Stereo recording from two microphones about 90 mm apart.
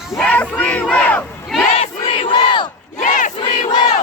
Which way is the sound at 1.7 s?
75° left (ahead or behind).